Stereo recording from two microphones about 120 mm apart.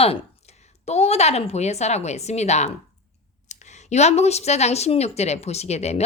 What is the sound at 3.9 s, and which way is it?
Speech, 65° left (ahead or behind).